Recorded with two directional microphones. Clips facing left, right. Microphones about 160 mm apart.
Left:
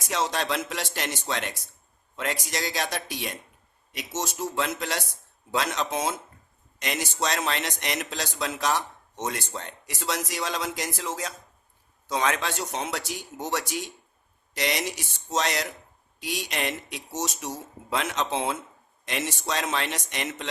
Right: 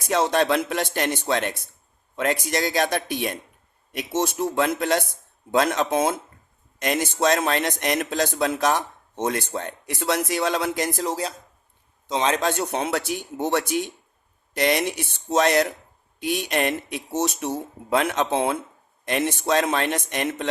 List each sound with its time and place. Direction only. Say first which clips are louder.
0.0 s a man's voice: right 7 dB; 55° right (ahead or behind)
11.0 s a man's voice: right 6 dB; 35° right (ahead or behind)
12.4 s a man's voice: right 7 dB; 50° right (ahead or behind)